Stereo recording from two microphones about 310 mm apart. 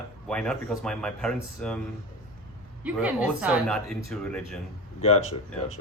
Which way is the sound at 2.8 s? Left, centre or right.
Centre.